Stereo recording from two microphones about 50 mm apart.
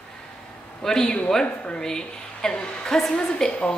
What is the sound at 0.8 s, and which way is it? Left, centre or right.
Speech, centre.